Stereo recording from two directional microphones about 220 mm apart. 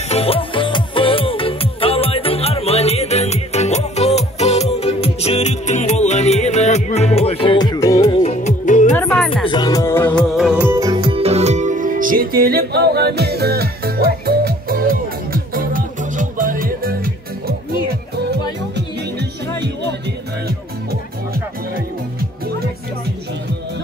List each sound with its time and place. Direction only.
0.1 s music: 25° left (ahead or behind)
8.0 s music: 30° left (ahead or behind)
8.9 s music: 5° left (ahead or behind)
9.3 s music: 20° left (ahead or behind); by 17.6 s 40° right (ahead or behind)
19.1 s music: 50° right (ahead or behind)